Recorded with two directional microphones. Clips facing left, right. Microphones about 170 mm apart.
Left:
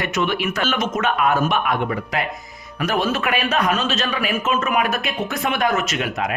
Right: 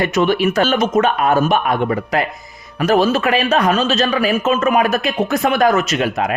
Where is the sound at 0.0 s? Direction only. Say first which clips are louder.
Right 7 dB; 35° right (ahead or behind).